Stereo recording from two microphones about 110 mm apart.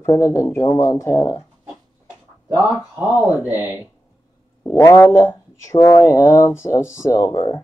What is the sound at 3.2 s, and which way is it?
Speech, 35° left (ahead or behind).